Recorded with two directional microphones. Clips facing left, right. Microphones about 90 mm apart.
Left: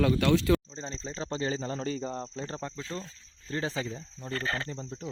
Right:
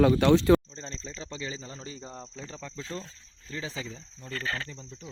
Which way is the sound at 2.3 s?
60° left (ahead or behind).